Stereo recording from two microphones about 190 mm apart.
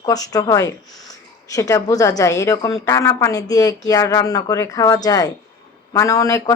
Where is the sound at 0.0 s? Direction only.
20° left (ahead or behind).